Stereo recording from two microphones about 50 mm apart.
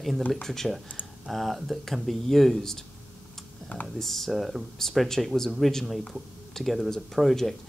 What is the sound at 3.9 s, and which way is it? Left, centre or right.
Speech, centre.